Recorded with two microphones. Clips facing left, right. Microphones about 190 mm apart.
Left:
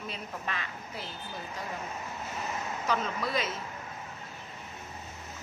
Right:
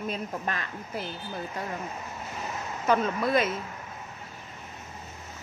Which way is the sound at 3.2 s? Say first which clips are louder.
Right 8 dB; 55° right (ahead or behind).